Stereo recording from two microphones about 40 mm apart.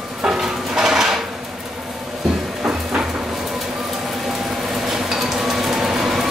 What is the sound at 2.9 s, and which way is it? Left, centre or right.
Vehicle, right.